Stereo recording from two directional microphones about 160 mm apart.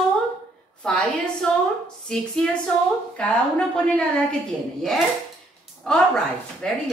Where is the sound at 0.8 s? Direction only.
5° left (ahead or behind).